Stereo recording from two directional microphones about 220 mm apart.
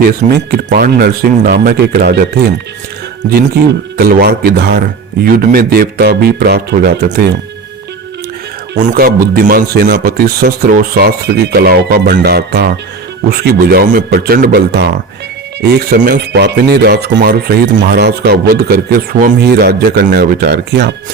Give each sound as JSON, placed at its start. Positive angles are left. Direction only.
{"t": 0.0, "sound": "speech", "side_deg": -45}
{"t": 3.9, "sound": "speech", "side_deg": -45}
{"t": 8.8, "sound": "speech", "side_deg": -40}